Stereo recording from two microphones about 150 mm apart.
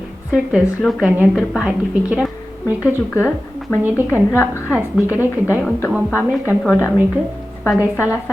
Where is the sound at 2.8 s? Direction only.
15° left (ahead or behind).